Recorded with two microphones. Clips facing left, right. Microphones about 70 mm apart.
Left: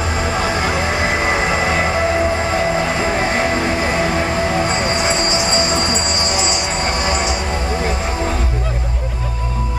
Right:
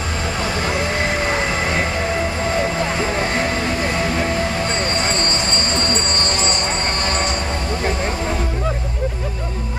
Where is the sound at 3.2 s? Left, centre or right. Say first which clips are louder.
Left 3 dB; centre.